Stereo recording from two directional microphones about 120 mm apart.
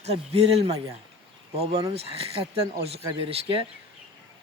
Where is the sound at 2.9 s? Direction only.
55° right (ahead or behind).